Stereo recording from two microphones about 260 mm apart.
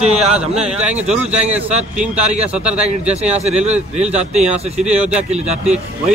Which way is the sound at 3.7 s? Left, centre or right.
Right.